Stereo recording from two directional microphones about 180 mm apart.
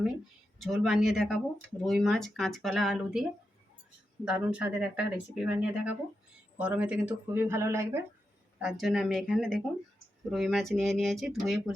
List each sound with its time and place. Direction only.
0.6 s speech: centre (ahead or behind)
4.3 s speech: 10° right (ahead or behind)
8.5 s speech: 5° right (ahead or behind)